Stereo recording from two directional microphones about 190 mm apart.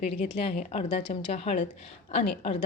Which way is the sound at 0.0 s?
35° left (ahead or behind).